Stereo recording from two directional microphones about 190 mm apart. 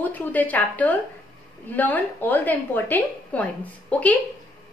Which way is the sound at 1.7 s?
10° left (ahead or behind).